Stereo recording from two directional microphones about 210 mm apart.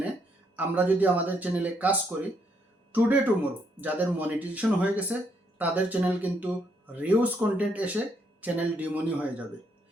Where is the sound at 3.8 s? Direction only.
10° right (ahead or behind).